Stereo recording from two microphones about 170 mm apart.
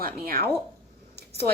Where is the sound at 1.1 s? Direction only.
70° right (ahead or behind).